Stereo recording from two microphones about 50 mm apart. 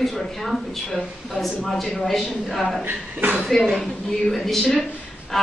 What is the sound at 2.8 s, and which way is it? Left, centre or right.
Speech, right.